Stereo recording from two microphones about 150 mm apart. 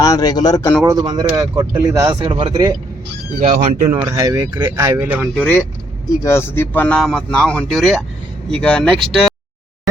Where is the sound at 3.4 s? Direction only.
55° right (ahead or behind).